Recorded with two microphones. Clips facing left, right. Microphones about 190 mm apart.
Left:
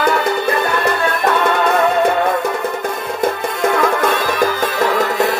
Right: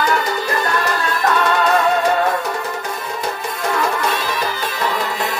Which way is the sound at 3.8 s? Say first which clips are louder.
Left 4 dB; 50° left (ahead or behind).